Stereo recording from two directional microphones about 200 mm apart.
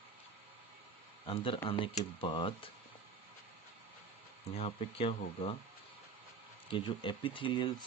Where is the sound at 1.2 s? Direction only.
25° left (ahead or behind).